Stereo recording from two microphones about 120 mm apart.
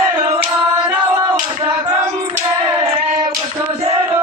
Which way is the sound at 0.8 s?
10° right (ahead or behind).